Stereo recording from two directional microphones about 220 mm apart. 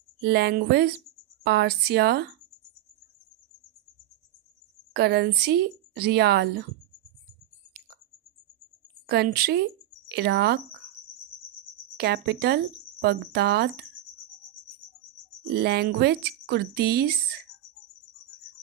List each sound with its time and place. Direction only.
0.2 s speech: 50° right (ahead or behind)
4.9 s speech: 45° right (ahead or behind)
9.0 s speech: 45° right (ahead or behind)
11.9 s speech: 50° right (ahead or behind)
15.5 s speech: 45° right (ahead or behind)